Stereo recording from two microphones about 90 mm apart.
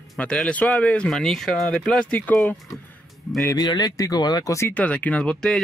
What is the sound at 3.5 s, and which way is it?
Speech, 45° left (ahead or behind).